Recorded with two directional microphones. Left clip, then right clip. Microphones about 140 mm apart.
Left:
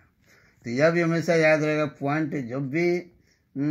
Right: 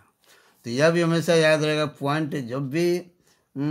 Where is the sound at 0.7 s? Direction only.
15° right (ahead or behind).